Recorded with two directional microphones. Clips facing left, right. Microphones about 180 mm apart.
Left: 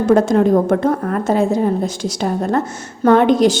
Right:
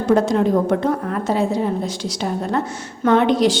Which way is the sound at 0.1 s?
50° left (ahead or behind).